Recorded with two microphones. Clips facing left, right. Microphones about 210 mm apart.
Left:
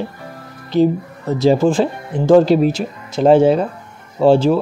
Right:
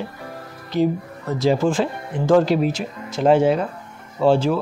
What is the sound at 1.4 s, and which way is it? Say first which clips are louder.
Speech: left 5 dB; 30° left (ahead or behind).